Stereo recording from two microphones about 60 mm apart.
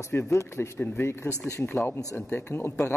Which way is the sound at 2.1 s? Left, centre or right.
Left.